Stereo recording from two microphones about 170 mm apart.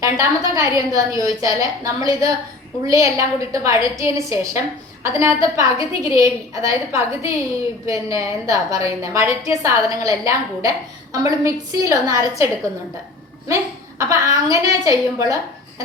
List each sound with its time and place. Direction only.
0.0 s a woman's voice: 20° right (ahead or behind)
14.0 s a woman's voice: 20° right (ahead or behind)